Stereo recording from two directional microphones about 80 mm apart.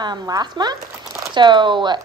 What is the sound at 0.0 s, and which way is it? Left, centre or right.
Speech, right.